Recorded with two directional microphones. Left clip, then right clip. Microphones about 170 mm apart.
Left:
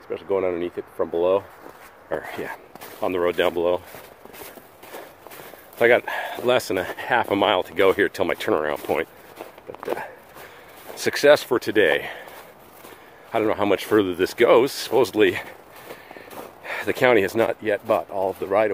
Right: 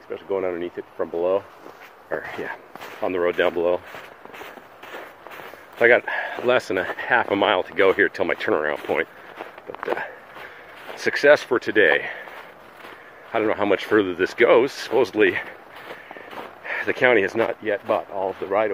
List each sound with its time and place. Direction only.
0.1 s speech: 45° left (ahead or behind)
2.0 s speech: 25° left (ahead or behind); by 4.0 s 10° left (ahead or behind)
5.8 s speech: 15° left (ahead or behind)
9.4 s walk: centre (ahead or behind)
10.9 s speech: 20° left (ahead or behind)
13.3 s speech: 15° left (ahead or behind)
16.6 s speech: 25° left (ahead or behind)